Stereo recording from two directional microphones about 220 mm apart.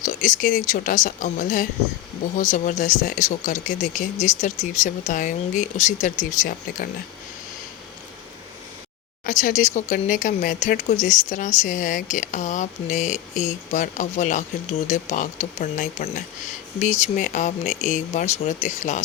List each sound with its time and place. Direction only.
0.0 s a sound: 35° left (ahead or behind)
0.7 s speech: 35° left (ahead or behind)
9.2 s speech: 35° left (ahead or behind)